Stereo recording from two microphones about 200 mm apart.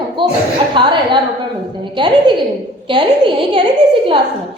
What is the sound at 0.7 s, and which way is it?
Speech, 25° right (ahead or behind).